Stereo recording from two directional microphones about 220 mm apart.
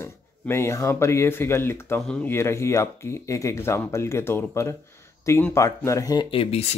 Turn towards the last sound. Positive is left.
turn(degrees=25)  # may be behind; listen again after turning